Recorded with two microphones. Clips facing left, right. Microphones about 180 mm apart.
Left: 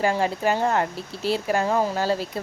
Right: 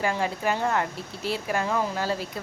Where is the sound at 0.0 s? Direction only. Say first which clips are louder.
Left 4 dB; 35° left (ahead or behind).